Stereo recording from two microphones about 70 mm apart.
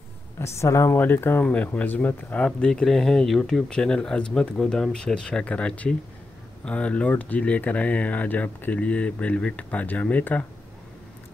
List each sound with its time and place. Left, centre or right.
0.4 s speech: left
1.4 s speech: left